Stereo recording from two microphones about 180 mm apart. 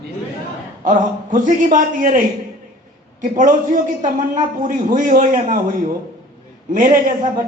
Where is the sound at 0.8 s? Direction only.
45° right (ahead or behind).